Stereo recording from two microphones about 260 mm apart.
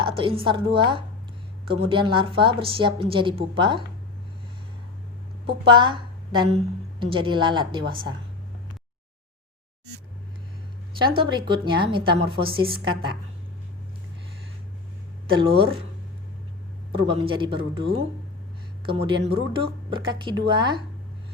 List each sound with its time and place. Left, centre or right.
0.0 s a woman's voice: centre
5.6 s a woman's voice: centre
11.2 s a woman's voice: centre
15.4 s a woman's voice: centre
16.9 s a woman's voice: right